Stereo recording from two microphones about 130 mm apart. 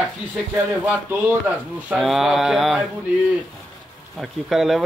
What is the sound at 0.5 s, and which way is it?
A man's voice, 10° right (ahead or behind).